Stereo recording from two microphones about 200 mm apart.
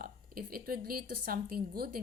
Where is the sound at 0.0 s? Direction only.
45° right (ahead or behind).